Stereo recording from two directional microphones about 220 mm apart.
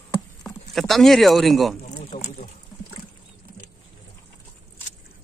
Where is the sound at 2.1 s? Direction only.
40° left (ahead or behind).